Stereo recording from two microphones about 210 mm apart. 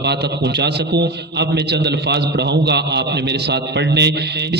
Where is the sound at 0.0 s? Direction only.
55° right (ahead or behind).